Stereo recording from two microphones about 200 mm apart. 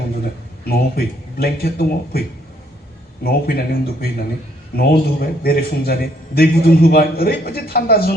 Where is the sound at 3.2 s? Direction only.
50° left (ahead or behind).